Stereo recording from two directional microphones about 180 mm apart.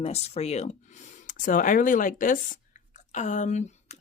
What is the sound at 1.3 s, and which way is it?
Speech, 45° left (ahead or behind).